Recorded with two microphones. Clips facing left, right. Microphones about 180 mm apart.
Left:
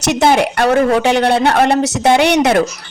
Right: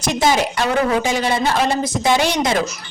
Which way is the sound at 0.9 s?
65° left (ahead or behind).